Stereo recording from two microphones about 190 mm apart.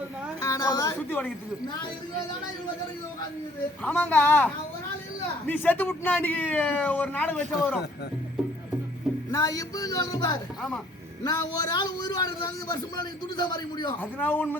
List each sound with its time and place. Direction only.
0.4 s a woman's voice: 15° left (ahead or behind)
3.8 s speech: 10° left (ahead or behind)
9.3 s speech: 15° left (ahead or behind)
14.0 s speech: 10° left (ahead or behind)